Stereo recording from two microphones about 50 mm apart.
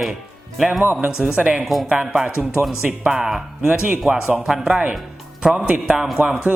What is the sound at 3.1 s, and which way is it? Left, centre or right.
Speech, centre.